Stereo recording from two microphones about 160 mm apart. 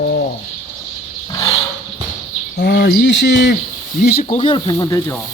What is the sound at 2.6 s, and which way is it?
Cricket, 75° left (ahead or behind).